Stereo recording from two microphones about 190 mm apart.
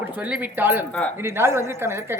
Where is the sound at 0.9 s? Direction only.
5° left (ahead or behind).